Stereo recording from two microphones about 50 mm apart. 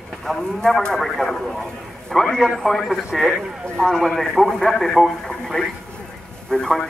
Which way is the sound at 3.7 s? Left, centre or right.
Centre.